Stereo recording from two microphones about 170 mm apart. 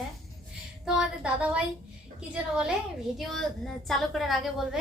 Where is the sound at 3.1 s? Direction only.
Centre (ahead or behind).